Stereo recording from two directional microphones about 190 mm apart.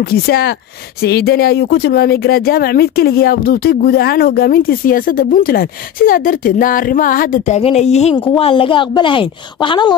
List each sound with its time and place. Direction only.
0.0 s speech: 55° left (ahead or behind); by 9.9 s 25° left (ahead or behind)